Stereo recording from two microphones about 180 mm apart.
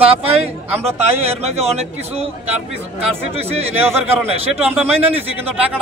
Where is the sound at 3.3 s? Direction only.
35° right (ahead or behind).